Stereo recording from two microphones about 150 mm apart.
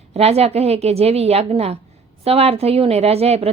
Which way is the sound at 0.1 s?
45° right (ahead or behind).